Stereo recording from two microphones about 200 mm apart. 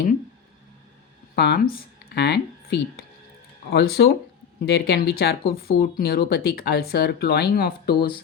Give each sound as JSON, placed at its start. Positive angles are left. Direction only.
{"t": 1.4, "sound": "speech", "side_deg": 50}